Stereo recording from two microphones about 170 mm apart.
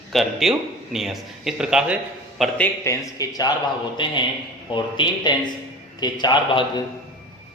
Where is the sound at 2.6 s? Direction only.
20° left (ahead or behind).